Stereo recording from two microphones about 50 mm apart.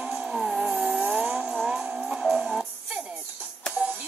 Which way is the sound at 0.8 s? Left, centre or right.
Right.